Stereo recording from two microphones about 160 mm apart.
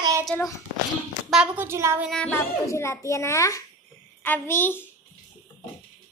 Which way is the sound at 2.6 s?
15° left (ahead or behind).